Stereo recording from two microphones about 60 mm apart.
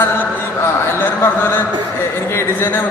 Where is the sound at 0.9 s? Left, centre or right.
Left.